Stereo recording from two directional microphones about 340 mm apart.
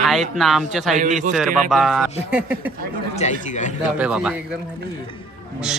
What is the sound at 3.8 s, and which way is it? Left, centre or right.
Speech, centre.